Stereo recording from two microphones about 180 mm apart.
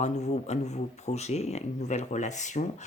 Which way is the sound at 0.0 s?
40° left (ahead or behind).